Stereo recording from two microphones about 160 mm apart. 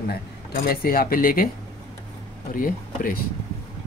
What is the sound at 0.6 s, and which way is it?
Speech, 70° left (ahead or behind).